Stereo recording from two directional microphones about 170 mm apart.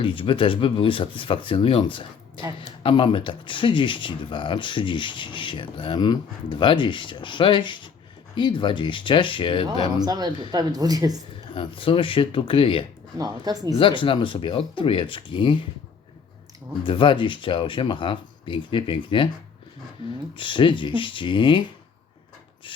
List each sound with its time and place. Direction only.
0.0 s speech: 30° left (ahead or behind)
9.9 s speech: 25° right (ahead or behind)
11.5 s speech: 30° left (ahead or behind)
13.1 s speech: 20° right (ahead or behind)
13.7 s speech: 30° left (ahead or behind)
16.8 s speech: 30° left (ahead or behind)
20.3 s speech: 30° left (ahead or behind)